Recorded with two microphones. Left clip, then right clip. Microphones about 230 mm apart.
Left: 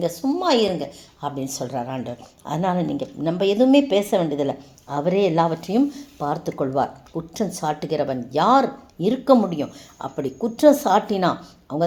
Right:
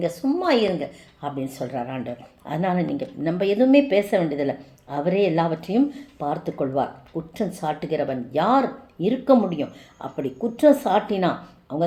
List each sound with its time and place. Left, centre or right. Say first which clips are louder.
0.0 s speech: left 1 dB; left